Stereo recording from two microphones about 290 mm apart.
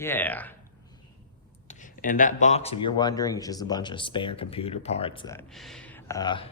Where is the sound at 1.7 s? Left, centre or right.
Left.